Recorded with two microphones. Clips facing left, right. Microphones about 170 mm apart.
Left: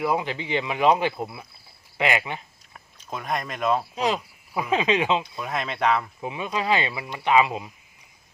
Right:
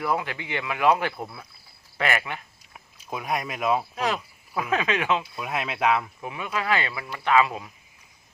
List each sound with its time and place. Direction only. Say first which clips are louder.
0.0 s speech: left 2 dB; 15° left (ahead or behind)
2.7 s speech: right 1 dB; 5° right (ahead or behind)
3.9 s speech: left 2 dB; 15° left (ahead or behind)
5.2 s speech: left 1 dB; 5° right (ahead or behind)
6.1 s speech: left 2 dB; 20° left (ahead or behind)